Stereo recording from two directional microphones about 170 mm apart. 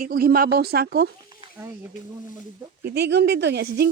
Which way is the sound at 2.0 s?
45° left (ahead or behind).